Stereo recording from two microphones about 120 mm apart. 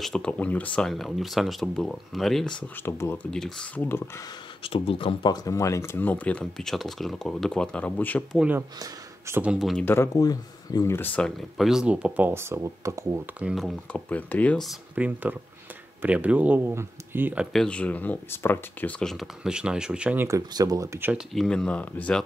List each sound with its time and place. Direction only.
0.0 s speech: 5° left (ahead or behind)
2.8 s speech: 20° left (ahead or behind)
3.3 s speech: 5° left (ahead or behind)
4.6 s speech: 50° left (ahead or behind)
5.3 s speech: 30° left (ahead or behind); by 8.2 s 10° left (ahead or behind)
9.4 s speech: 5° right (ahead or behind)
10.1 s speech: 30° left (ahead or behind); by 11.3 s 10° left (ahead or behind)
11.5 s speech: 5° right (ahead or behind); by 13.2 s 25° right (ahead or behind)
13.4 s speech: 5° right (ahead or behind)
13.9 s speech: 10° left (ahead or behind)
15.0 s speech: 10° right (ahead or behind)
17.5 s speech: 5° left (ahead or behind); by 20.2 s 10° right (ahead or behind)
20.2 s speech: 30° right (ahead or behind)
21.3 s speech: 5° left (ahead or behind)